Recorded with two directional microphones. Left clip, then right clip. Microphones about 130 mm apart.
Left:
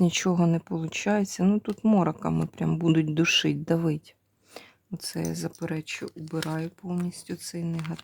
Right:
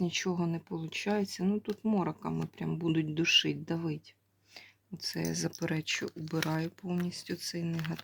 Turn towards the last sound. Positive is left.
turn(degrees=20)  # may be behind; listen again after turning